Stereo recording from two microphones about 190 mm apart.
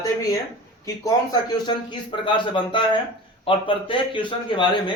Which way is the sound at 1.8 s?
25° left (ahead or behind).